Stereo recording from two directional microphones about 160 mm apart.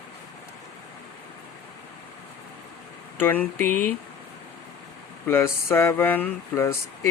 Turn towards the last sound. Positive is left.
turn(degrees=15)  # may be behind; listen again after turning